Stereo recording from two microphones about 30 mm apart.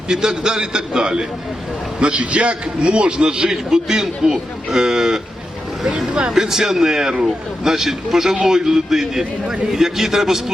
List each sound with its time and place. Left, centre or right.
0.1 s a man's voice: right
2.0 s a man's voice: right; by 5.2 s centre
6.3 s a man's voice: centre